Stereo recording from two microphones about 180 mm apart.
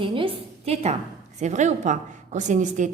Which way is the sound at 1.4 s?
40° right (ahead or behind).